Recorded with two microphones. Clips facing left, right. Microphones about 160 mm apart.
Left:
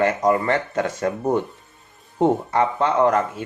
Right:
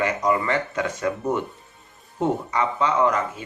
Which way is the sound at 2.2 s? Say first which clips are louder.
Left 5 dB; 55° left (ahead or behind).